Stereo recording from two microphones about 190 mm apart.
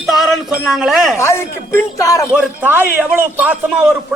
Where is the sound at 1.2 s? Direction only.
15° left (ahead or behind).